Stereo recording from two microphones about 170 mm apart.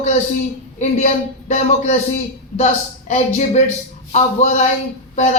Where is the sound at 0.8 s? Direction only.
40° left (ahead or behind).